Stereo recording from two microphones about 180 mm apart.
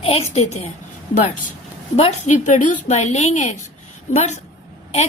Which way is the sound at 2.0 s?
40° left (ahead or behind).